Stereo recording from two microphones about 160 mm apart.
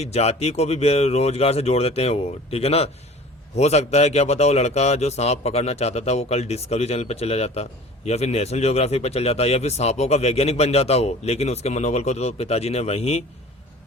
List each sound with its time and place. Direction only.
0.0 s speech: 40° left (ahead or behind)